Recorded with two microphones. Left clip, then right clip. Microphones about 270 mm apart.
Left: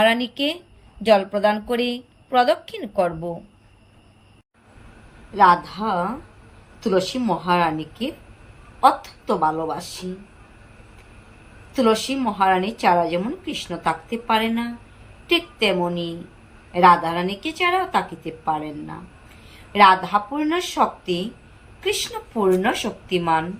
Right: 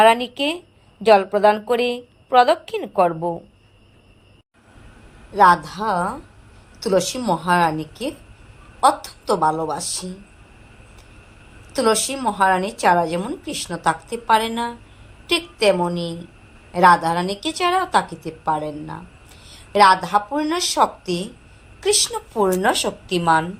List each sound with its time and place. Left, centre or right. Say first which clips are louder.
0.0 s a woman's voice: right 4 dB; centre
5.3 s a woman's voice: right 1 dB; right
11.7 s a woman's voice: right 1 dB; centre